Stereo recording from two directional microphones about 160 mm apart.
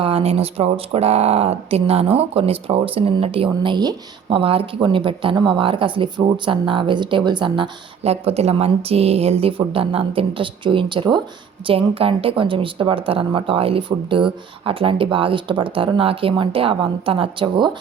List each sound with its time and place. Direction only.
0.0 s speech: 40° right (ahead or behind)